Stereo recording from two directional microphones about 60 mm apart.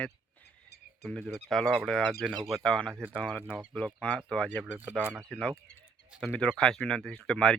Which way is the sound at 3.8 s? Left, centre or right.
Centre.